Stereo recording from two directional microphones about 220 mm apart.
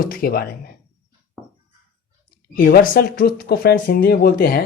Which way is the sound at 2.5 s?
40° left (ahead or behind).